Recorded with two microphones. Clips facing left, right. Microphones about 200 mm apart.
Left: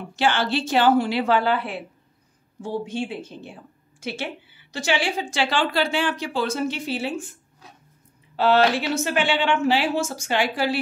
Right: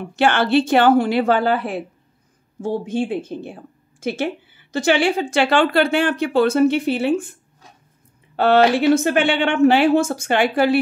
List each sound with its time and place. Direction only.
0.1 s a woman's voice: 60° right (ahead or behind)
8.4 s a woman's voice: 55° right (ahead or behind)